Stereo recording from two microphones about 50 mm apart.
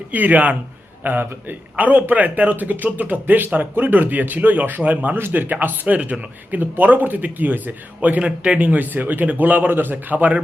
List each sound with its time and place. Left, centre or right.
0.1 s speech: right
5.1 s speech: right